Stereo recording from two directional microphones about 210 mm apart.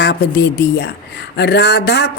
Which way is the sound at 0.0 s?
55° left (ahead or behind).